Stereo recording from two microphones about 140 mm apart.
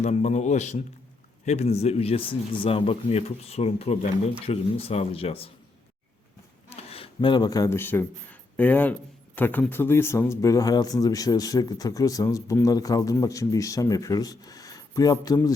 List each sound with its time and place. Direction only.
0.0 s speech: 55° left (ahead or behind)
6.7 s speech: 45° left (ahead or behind); by 15.5 s 25° left (ahead or behind)